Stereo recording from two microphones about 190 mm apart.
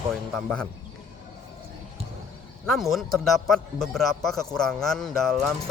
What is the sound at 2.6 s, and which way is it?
A man's voice, centre (ahead or behind).